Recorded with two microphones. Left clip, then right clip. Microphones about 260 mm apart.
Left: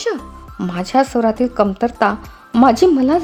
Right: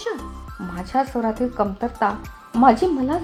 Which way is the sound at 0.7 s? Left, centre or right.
Left.